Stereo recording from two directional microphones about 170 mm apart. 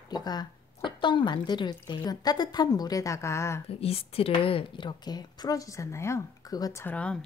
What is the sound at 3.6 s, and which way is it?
Speech, 35° left (ahead or behind).